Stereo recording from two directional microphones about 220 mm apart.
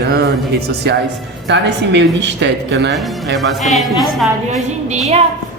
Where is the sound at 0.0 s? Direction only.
45° right (ahead or behind).